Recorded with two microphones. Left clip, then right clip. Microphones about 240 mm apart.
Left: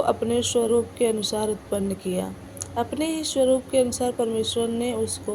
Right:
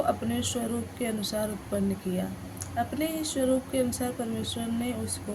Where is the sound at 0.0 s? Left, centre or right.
Centre.